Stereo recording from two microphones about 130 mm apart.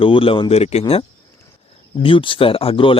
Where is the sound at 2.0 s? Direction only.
40° left (ahead or behind).